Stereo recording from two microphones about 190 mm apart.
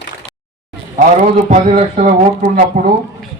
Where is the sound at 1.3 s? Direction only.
35° right (ahead or behind).